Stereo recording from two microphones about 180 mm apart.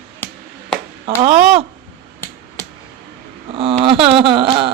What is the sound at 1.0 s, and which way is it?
Speech, 30° right (ahead or behind).